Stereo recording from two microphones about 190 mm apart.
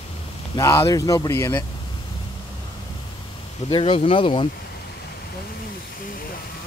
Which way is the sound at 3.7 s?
25° left (ahead or behind).